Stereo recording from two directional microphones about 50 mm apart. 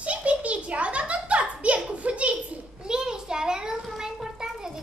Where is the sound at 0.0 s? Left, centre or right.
Right.